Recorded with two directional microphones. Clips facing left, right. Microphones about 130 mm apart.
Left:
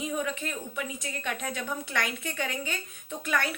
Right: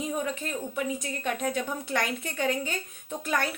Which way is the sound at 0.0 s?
35° right (ahead or behind).